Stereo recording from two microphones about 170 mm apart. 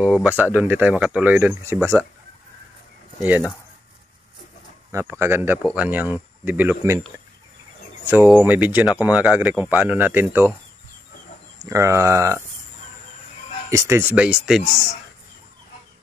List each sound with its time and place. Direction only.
0.0 s speech: 5° right (ahead or behind)
3.2 s speech: 10° right (ahead or behind)
4.9 s speech: 15° right (ahead or behind)
8.0 s speech: 10° right (ahead or behind)
11.6 s speech: 20° right (ahead or behind)
13.7 s speech: 15° right (ahead or behind)